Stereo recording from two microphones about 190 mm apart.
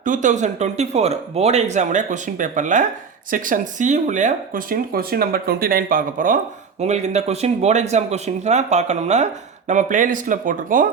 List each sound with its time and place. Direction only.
0.0 s speech: 40° right (ahead or behind)